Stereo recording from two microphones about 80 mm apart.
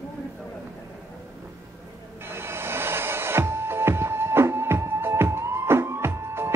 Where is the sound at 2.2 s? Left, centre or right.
Right.